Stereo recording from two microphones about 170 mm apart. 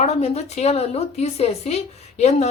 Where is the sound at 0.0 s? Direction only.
40° left (ahead or behind).